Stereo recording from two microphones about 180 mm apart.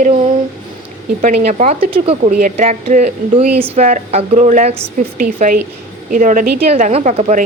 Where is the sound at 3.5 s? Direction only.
10° right (ahead or behind).